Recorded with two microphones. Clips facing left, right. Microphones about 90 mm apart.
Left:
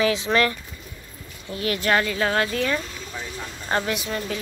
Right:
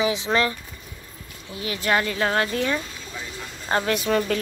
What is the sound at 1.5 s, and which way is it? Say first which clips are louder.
Speech: left 2 dB; 15° right (ahead or behind).